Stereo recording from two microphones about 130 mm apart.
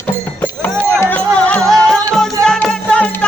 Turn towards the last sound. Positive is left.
turn(degrees=10)  # may be behind; listen again after turning